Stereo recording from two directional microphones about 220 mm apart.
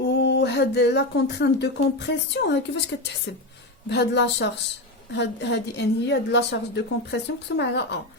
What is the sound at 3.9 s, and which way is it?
A woman's voice, 50° left (ahead or behind).